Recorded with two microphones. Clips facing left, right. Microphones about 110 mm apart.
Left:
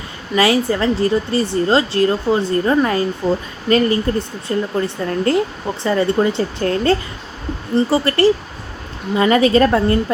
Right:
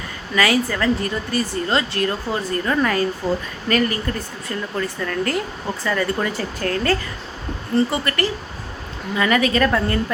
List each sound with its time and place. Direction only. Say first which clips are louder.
0.3 s a woman's voice: left 4 dB; 25° left (ahead or behind)